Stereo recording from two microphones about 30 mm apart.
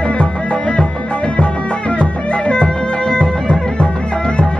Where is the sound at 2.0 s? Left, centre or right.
Left.